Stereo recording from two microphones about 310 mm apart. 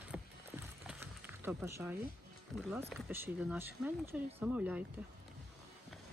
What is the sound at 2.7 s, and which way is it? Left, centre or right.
Speech, centre.